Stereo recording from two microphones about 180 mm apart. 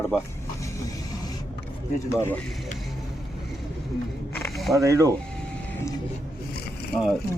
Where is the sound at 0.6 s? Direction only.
15° left (ahead or behind).